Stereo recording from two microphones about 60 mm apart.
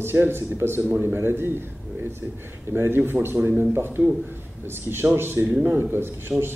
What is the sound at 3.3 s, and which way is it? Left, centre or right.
Speech, right.